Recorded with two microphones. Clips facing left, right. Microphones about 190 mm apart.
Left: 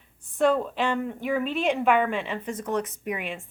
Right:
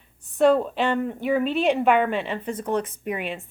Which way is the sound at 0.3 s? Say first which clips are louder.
Right 4 dB; 35° right (ahead or behind).